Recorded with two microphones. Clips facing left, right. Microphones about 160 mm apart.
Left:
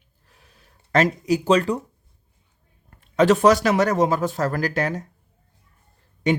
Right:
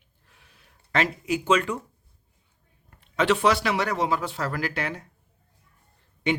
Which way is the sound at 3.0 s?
40° left (ahead or behind).